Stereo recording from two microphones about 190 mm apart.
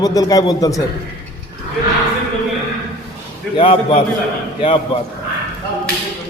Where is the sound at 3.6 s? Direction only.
30° left (ahead or behind).